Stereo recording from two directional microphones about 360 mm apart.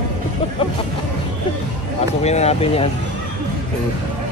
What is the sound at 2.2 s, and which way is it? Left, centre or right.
Speech, centre.